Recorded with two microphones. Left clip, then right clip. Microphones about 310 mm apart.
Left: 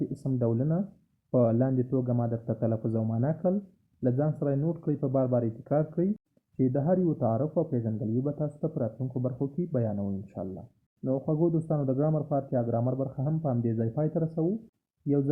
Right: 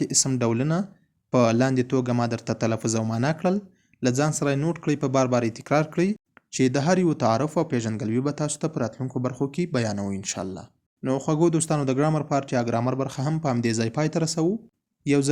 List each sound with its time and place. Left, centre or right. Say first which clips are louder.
0.2 s speech: right 7 dB; right